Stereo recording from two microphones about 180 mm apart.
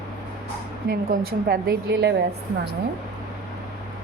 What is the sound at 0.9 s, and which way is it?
A woman's voice, 60° right (ahead or behind).